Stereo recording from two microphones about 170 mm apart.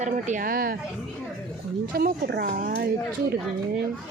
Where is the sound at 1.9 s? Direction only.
65° right (ahead or behind).